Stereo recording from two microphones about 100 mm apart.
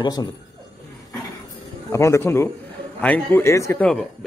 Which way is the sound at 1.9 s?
30° left (ahead or behind).